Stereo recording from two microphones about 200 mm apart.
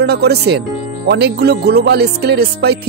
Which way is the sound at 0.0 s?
55° right (ahead or behind).